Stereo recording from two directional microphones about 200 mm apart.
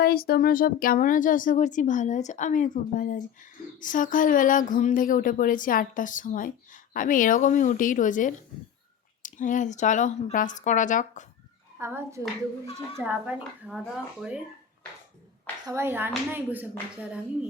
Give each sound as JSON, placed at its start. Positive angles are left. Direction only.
{"t": 0.0, "sound": "speech", "side_deg": 50}
{"t": 11.8, "sound": "speech", "side_deg": -10}
{"t": 15.6, "sound": "speech", "side_deg": -10}